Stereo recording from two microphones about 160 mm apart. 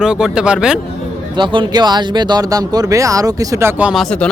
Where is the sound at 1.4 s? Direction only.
30° right (ahead or behind); by 4.0 s 5° right (ahead or behind).